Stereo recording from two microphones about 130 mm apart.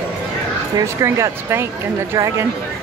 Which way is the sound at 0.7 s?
20° right (ahead or behind).